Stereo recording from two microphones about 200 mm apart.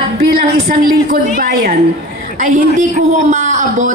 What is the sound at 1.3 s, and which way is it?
A woman's voice, 45° right (ahead or behind).